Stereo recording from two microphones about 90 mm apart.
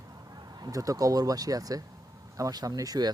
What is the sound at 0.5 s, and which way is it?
Speech, 45° right (ahead or behind).